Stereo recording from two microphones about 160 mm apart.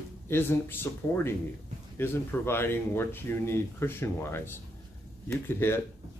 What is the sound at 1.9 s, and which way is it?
Speech, 15° left (ahead or behind).